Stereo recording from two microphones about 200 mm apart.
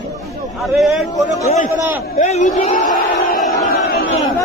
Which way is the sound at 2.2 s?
35° left (ahead or behind).